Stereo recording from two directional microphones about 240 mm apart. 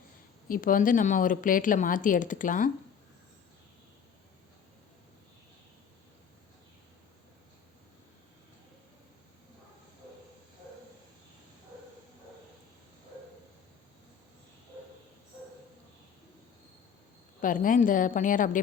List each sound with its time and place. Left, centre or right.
0.4 s speech: left
17.4 s speech: left